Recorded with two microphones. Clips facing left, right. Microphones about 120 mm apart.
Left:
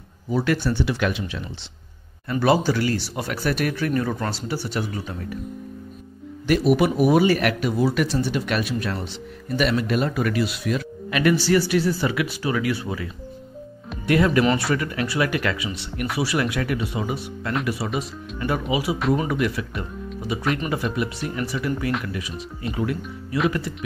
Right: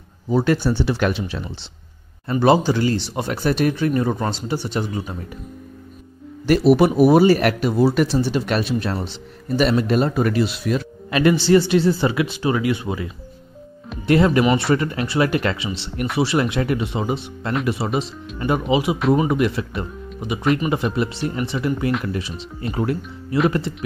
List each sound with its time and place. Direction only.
0.3 s speech: 30° right (ahead or behind)
2.4 s speech: 25° right (ahead or behind)
6.4 s speech: 35° right (ahead or behind)
23.3 s speech: 25° right (ahead or behind)